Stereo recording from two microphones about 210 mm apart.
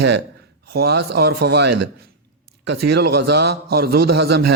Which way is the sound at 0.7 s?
50° right (ahead or behind).